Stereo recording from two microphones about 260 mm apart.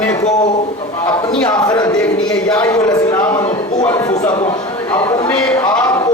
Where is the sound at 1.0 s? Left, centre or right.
Centre.